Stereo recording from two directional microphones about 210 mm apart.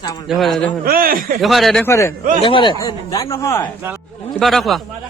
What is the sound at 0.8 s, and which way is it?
Speech, 45° right (ahead or behind).